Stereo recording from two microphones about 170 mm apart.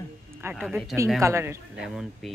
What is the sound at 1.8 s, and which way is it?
Speech, centre (ahead or behind).